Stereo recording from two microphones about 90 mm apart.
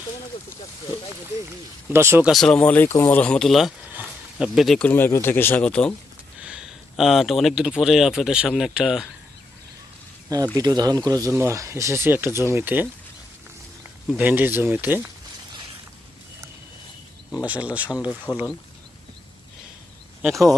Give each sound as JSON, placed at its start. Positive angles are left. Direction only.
{"t": 1.9, "sound": "speech", "side_deg": -30}
{"t": 2.3, "sound": "speech", "side_deg": 5}
{"t": 2.6, "sound": "speech", "side_deg": 15}
{"t": 3.3, "sound": "speech", "side_deg": 5}
{"t": 3.9, "sound": "a sound", "side_deg": -20}
{"t": 4.4, "sound": "speech", "side_deg": 0}
{"t": 4.8, "sound": "speech", "side_deg": 20}
{"t": 6.4, "sound": "speech", "side_deg": -10}
{"t": 10.5, "sound": "speech", "side_deg": -45}
{"t": 11.3, "sound": "speech", "side_deg": -30}
{"t": 14.2, "sound": "speech", "side_deg": -20}
{"t": 17.4, "sound": "speech", "side_deg": -15}
{"t": 18.3, "sound": "speech", "side_deg": 45}